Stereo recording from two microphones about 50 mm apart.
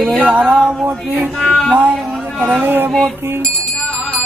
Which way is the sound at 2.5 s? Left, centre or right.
Right.